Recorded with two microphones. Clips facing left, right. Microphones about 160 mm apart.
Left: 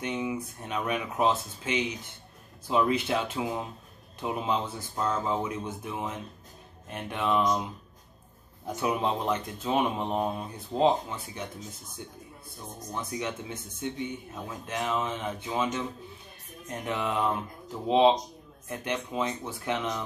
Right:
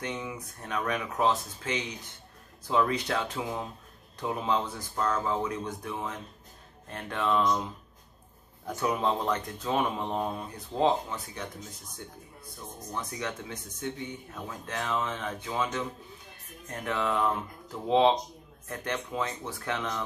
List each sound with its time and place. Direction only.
0.0 s speech: 20° left (ahead or behind)
12.9 s speech: 20° left (ahead or behind)